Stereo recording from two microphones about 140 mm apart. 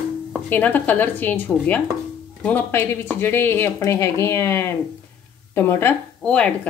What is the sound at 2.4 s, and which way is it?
Speech, 10° left (ahead or behind).